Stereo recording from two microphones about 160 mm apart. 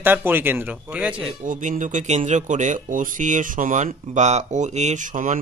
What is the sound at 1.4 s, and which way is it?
Speech, 50° right (ahead or behind).